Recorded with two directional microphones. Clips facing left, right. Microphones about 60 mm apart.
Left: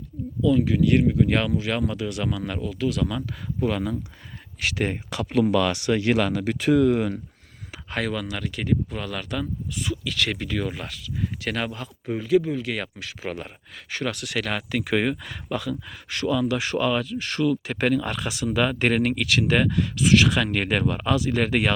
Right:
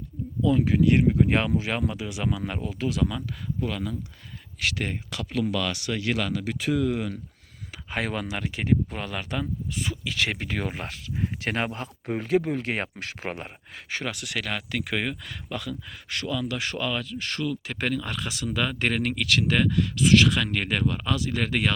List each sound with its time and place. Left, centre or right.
0.4 s speech: right
1.9 s speech: centre
3.2 s speech: centre; by 7.2 s left
7.9 s speech: centre; by 13.4 s right
14.0 s speech: centre